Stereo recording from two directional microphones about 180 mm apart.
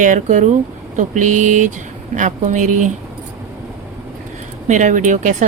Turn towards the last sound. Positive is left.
turn(degrees=-45)  # may be behind; listen again after turning